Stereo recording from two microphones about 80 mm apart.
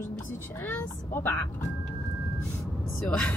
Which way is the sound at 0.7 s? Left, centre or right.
Left.